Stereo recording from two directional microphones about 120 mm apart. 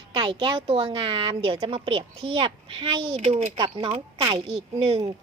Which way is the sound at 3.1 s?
65° right (ahead or behind).